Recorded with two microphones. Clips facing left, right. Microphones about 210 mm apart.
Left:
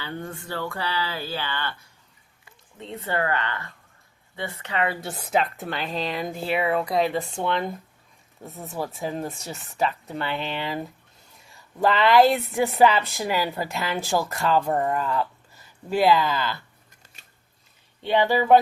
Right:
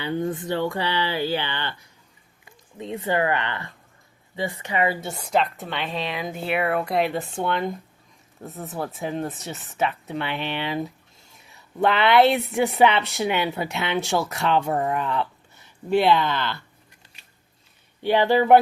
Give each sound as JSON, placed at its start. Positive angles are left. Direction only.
{"t": 0.0, "sound": "speech", "side_deg": -20}
{"t": 18.0, "sound": "speech", "side_deg": -15}